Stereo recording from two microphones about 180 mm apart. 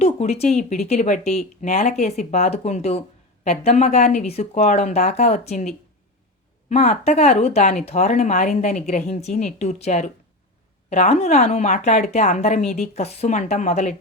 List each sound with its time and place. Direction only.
0.0 s speech: 35° left (ahead or behind)